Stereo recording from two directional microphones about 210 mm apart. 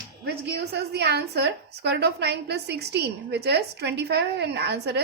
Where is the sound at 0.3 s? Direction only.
50° right (ahead or behind).